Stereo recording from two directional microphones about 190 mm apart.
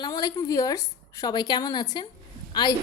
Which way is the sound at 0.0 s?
20° left (ahead or behind).